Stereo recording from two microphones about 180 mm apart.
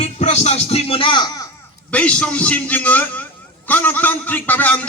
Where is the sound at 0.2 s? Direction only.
40° left (ahead or behind).